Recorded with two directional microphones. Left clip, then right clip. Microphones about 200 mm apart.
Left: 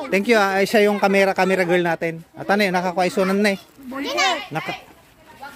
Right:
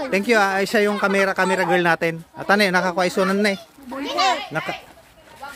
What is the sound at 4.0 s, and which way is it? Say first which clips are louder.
Speech: even; 50° left (ahead or behind).